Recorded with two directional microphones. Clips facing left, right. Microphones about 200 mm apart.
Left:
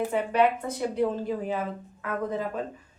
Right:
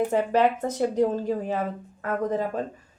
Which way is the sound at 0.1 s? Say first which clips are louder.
Right 2 dB; 40° right (ahead or behind).